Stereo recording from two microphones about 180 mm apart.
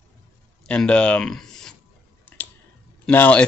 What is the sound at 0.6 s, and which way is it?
Speech, 5° left (ahead or behind).